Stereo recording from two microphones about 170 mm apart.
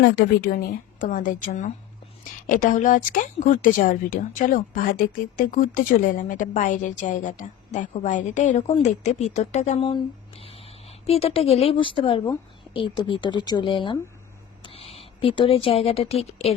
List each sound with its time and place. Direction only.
0.0 s speech: 80° left
0.9 s a woman's voice: 50° left (ahead or behind); by 16.6 s 35° left (ahead or behind)